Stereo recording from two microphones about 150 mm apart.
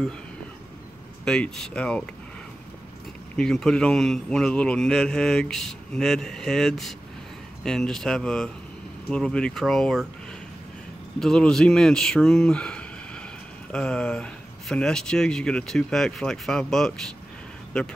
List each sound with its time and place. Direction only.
1.2 s speech: 5° left (ahead or behind)
3.3 s a man's voice: 5° left (ahead or behind)
11.1 s a man's voice: 5° left (ahead or behind)